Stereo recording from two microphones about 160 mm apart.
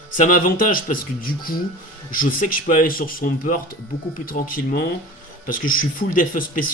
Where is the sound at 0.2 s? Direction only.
60° left (ahead or behind).